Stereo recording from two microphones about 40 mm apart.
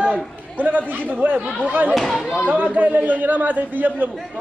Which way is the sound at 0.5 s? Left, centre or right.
Right.